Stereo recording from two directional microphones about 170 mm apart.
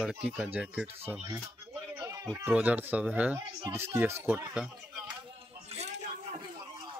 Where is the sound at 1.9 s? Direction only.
20° right (ahead or behind).